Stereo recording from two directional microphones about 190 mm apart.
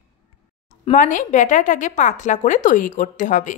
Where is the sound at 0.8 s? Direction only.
40° left (ahead or behind).